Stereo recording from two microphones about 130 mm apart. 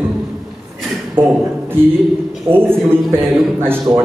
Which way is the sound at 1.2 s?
15° right (ahead or behind).